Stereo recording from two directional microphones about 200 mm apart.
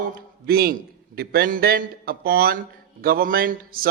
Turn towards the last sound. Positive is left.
turn(degrees=-45)  # may be behind; listen again after turning